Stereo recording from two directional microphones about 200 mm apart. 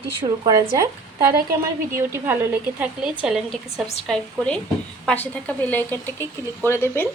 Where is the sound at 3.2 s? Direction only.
Centre (ahead or behind).